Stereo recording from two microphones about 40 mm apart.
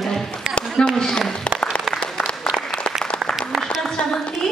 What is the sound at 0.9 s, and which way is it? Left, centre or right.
Speech, centre.